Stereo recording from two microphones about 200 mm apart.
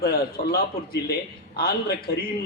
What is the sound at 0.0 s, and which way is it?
A man's voice, 50° left (ahead or behind).